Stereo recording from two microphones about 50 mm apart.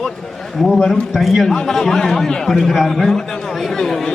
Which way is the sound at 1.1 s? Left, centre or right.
Centre.